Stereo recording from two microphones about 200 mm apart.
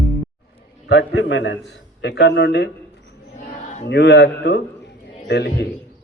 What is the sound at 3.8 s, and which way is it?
A man's voice, 60° left (ahead or behind).